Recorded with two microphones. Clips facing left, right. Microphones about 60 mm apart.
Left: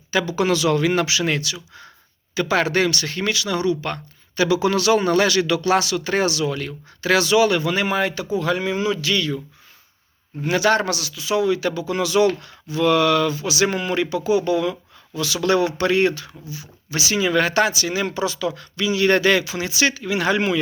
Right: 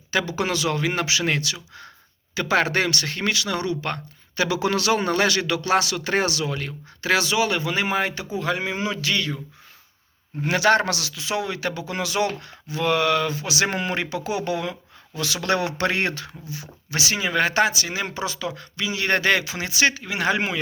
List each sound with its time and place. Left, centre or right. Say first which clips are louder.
0.1 s speech: left 4 dB; right
6.5 s speech: left 3 dB; right
10.4 s speech: even; right
10.8 s speech: left 3 dB; right
13.3 s speech: left 3 dB; right
17.2 s speech: left 3 dB; right